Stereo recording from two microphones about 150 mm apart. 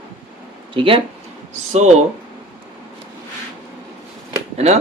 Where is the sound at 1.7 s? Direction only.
50° right (ahead or behind).